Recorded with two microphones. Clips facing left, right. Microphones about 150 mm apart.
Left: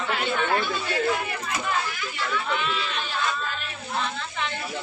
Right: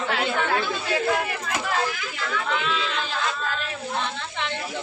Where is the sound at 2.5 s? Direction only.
90° right.